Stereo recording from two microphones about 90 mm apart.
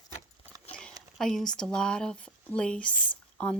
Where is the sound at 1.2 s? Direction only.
5° left (ahead or behind).